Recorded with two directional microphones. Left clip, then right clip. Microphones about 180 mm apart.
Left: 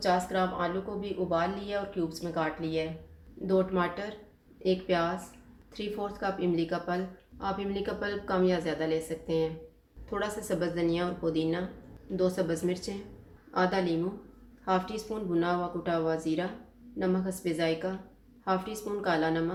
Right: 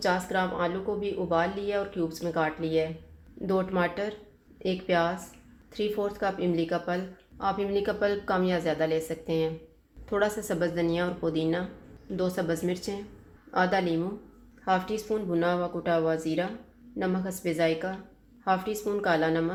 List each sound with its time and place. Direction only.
0.0 s speech: 45° right (ahead or behind)